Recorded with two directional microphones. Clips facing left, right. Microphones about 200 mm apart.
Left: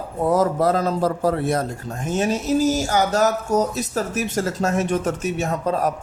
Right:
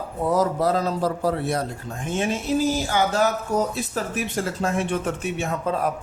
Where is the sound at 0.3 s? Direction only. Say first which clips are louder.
Left 3 dB; 50° left (ahead or behind).